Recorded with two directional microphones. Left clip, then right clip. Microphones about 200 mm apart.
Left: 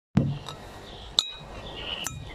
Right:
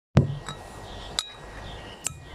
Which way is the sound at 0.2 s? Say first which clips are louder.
Right 3 dB; centre (ahead or behind).